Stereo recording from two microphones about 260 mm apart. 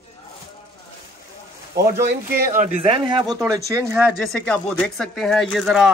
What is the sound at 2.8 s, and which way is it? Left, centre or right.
A man's voice, centre.